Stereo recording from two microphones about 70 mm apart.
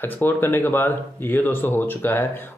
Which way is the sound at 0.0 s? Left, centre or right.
Left.